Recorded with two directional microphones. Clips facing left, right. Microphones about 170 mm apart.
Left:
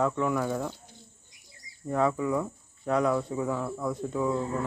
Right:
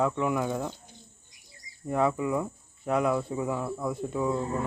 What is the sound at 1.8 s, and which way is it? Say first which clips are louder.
Speech: even; 10° right (ahead or behind).